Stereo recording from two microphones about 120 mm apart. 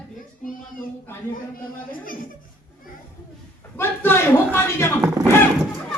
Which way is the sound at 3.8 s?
20° left (ahead or behind).